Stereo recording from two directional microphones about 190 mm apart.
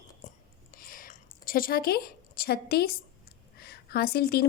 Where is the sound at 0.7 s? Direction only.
50° left (ahead or behind).